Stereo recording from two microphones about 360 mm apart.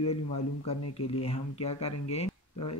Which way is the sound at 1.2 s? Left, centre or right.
Centre.